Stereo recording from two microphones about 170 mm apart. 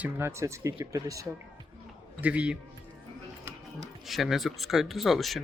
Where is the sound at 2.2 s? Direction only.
10° right (ahead or behind).